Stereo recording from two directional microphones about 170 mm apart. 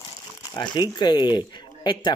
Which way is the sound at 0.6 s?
25° left (ahead or behind).